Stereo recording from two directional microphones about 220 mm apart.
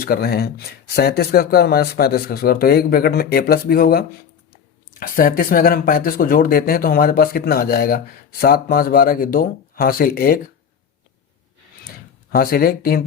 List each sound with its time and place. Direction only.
0.0 s speech: 45° left (ahead or behind)
12.3 s speech: 45° left (ahead or behind)